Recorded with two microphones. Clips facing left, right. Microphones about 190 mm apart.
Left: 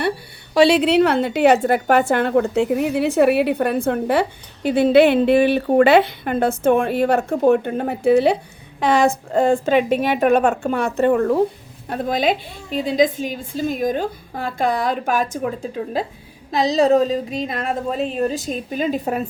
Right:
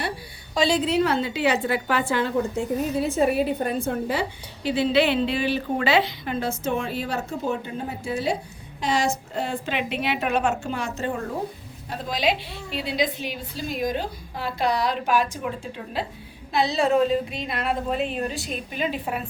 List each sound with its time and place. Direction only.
0.5 s a woman's voice: 75° left (ahead or behind)
11.9 s a woman's voice: 55° left (ahead or behind)